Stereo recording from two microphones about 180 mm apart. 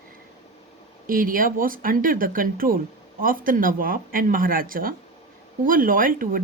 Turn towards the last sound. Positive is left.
turn(degrees=-50)  # may be behind; listen again after turning